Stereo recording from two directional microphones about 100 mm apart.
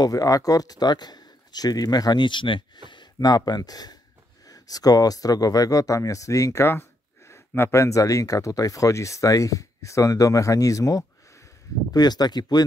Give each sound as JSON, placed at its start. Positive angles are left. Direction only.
{"t": 0.0, "sound": "speech", "side_deg": 35}